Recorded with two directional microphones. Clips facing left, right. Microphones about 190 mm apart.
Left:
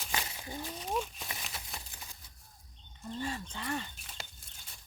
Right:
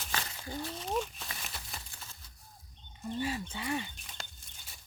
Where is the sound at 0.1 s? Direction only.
15° left (ahead or behind).